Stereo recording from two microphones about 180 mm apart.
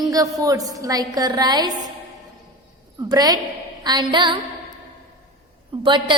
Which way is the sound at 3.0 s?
20° right (ahead or behind).